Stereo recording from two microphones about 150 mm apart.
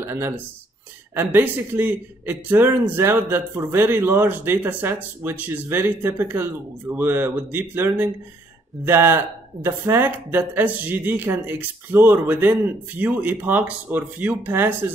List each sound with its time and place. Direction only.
0.0 s a man's voice: 15° right (ahead or behind)